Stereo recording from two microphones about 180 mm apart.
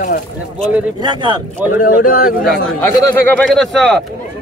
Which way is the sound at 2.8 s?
10° left (ahead or behind).